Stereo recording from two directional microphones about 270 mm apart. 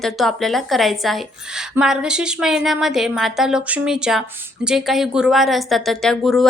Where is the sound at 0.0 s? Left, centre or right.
Centre.